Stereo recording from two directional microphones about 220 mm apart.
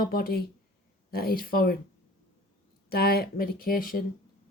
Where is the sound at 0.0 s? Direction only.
40° left (ahead or behind).